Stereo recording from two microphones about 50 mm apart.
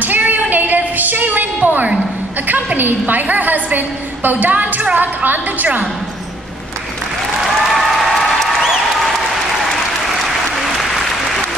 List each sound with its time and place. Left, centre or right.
0.0 s a sound: right
2.4 s a woman's voice: right
7.4 s applause: centre
10.5 s applause: centre